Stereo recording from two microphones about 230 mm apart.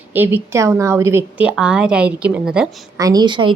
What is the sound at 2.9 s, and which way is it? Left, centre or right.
Speech, centre.